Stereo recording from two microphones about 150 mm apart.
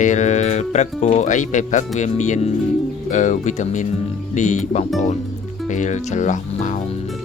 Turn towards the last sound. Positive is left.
turn(degrees=55)  # may be behind; listen again after turning